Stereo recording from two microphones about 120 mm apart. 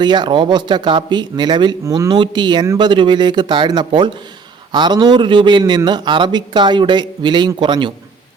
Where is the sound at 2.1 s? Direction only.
40° right (ahead or behind).